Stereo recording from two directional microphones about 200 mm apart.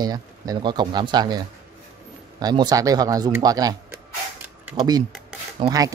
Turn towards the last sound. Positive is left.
turn(degrees=-20)  # may be behind; listen again after turning